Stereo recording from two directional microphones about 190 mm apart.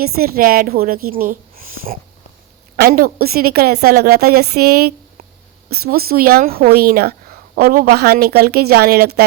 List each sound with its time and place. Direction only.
0.0 s a woman's voice: 50° right (ahead or behind)